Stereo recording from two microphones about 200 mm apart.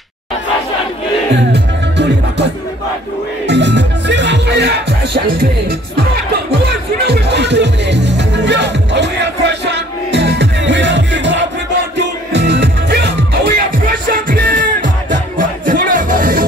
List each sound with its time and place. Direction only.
1.3 s music: 60° right (ahead or behind)
3.4 s music: 60° right (ahead or behind)
6.7 s music: 55° right (ahead or behind)
14.3 s music: 45° right (ahead or behind)